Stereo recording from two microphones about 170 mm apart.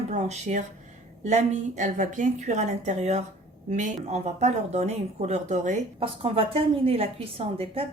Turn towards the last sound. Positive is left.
turn(degrees=-35)  # may be behind; listen again after turning